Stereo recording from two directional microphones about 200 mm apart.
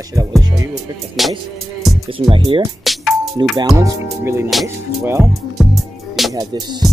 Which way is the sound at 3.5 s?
15° right (ahead or behind).